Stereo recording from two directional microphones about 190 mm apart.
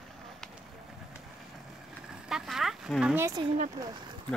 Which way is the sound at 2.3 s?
Centre (ahead or behind).